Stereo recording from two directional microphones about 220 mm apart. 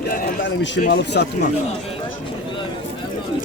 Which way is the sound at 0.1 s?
50° left (ahead or behind).